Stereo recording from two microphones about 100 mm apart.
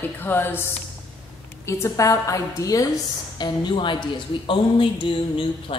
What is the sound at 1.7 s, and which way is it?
A woman's voice, 30° left (ahead or behind).